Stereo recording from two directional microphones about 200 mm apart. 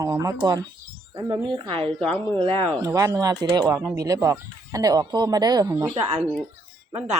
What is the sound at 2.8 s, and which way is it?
Speech, 15° right (ahead or behind).